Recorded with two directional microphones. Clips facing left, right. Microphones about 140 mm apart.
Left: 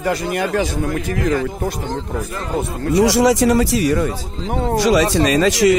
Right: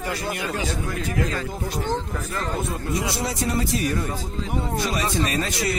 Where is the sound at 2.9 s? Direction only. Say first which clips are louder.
Left 16 dB; 90° left.